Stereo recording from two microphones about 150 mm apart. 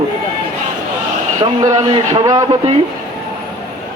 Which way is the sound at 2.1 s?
25° right (ahead or behind).